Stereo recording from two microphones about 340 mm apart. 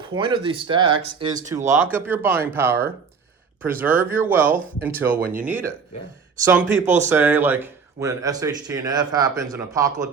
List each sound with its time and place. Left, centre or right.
0.1 s speech: centre
6.8 s speech: right
7.1 s speech: centre